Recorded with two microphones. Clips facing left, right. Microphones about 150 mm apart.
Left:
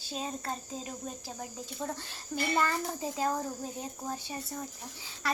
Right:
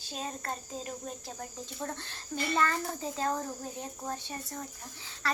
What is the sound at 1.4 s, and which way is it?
A child's voice, 10° left (ahead or behind).